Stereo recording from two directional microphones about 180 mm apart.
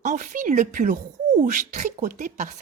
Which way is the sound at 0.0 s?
45° right (ahead or behind).